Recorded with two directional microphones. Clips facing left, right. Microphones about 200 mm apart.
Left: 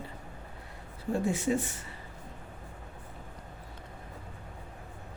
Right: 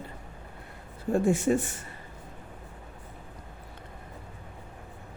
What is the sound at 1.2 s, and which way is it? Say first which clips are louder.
Speech: right 5 dB; 50° right (ahead or behind).